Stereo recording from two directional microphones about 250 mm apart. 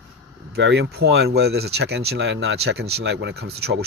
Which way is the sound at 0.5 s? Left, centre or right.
Right.